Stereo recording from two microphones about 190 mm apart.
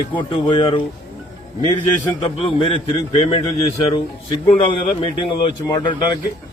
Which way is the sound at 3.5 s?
30° left (ahead or behind).